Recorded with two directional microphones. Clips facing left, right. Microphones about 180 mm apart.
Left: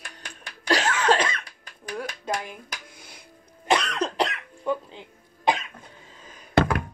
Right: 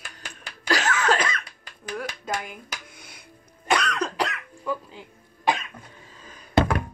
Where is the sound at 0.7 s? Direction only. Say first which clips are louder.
Left 1 dB; 30° left (ahead or behind).